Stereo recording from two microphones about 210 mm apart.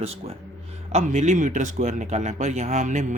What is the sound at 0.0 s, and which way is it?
Speech, 30° right (ahead or behind).